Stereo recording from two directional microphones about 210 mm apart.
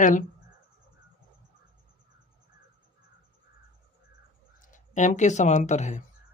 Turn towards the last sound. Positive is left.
turn(degrees=35)  # may be behind; listen again after turning